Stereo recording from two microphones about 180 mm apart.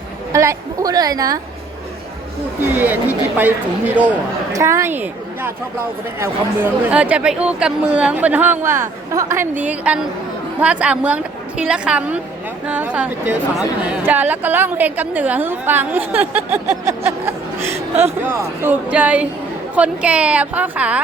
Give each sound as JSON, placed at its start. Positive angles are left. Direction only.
{"t": 0.3, "sound": "a woman's voice", "side_deg": -20}
{"t": 2.7, "sound": "a woman's voice", "side_deg": -10}